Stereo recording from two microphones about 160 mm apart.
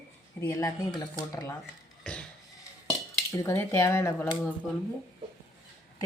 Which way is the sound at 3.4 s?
20° left (ahead or behind).